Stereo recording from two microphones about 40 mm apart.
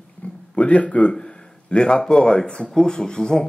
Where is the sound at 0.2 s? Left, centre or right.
Left.